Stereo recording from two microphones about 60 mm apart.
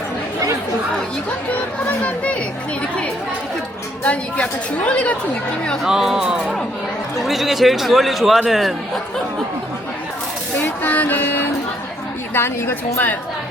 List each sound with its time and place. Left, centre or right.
2.0 s speech: left
4.0 s speech: left
5.8 s speech: centre
10.6 s music: left
12.3 s a woman's voice: left